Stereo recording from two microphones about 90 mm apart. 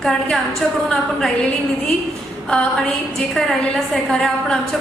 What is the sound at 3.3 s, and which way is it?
A woman's voice, 5° left (ahead or behind).